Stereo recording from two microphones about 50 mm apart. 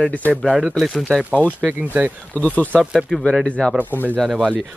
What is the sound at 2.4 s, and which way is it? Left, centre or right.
Speech, left.